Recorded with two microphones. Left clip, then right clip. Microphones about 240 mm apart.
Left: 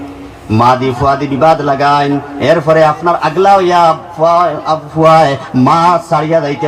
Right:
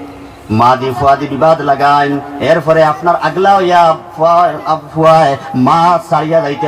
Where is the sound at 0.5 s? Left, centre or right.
Left.